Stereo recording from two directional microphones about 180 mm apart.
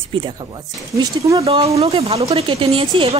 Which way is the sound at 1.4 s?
35° right (ahead or behind).